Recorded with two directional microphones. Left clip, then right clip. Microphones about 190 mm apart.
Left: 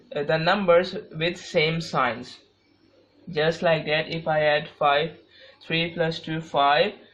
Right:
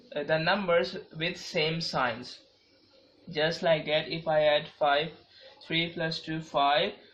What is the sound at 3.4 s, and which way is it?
Speech, 40° left (ahead or behind).